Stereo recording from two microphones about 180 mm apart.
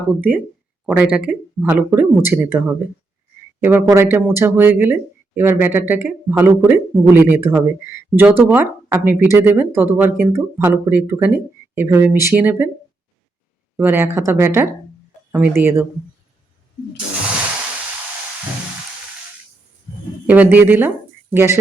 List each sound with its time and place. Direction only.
0.2 s speech: 10° right (ahead or behind)
13.7 s speech: 15° right (ahead or behind)
20.2 s speech: 10° right (ahead or behind)